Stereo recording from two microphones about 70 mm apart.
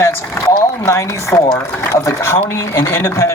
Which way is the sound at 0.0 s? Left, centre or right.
Left.